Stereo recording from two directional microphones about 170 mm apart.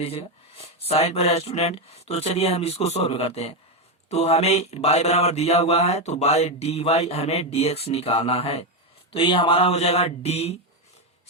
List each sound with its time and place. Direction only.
0.0 s mantra: 35° left (ahead or behind)